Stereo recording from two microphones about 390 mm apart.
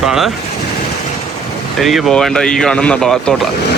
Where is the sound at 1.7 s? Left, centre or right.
Centre.